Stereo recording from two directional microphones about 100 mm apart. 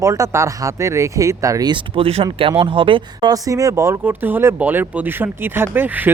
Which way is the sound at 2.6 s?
60° right (ahead or behind).